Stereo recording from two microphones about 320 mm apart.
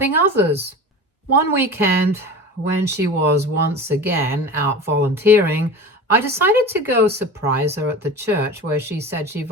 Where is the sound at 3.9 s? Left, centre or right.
Centre.